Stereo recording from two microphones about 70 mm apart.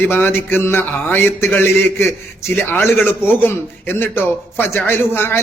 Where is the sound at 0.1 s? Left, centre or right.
Left.